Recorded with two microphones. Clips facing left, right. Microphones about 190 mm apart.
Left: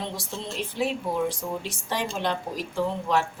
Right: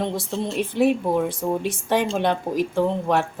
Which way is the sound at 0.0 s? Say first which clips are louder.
Right 8 dB; 55° right (ahead or behind).